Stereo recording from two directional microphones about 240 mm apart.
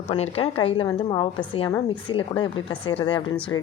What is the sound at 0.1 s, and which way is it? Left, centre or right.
A woman's voice, left.